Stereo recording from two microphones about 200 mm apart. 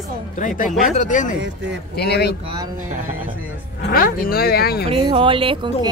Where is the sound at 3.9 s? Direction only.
45° left (ahead or behind).